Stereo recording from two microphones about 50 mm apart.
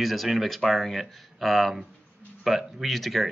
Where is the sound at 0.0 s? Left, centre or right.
Centre.